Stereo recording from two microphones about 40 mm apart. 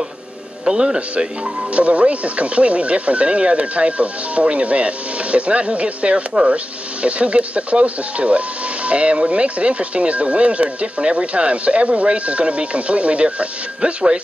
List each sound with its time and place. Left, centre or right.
0.7 s speech: centre